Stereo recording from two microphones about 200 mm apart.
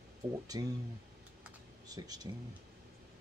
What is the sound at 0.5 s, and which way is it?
Speech, 20° right (ahead or behind).